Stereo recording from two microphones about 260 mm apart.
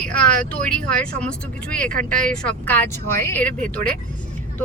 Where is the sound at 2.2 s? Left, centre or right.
Centre.